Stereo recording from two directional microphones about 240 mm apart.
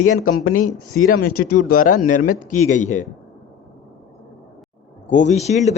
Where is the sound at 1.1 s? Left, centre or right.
Left.